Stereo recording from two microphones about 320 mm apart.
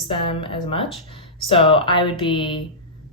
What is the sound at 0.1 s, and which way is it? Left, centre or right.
Speech, centre.